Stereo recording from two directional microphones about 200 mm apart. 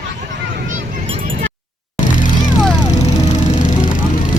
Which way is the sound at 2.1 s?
40° left (ahead or behind).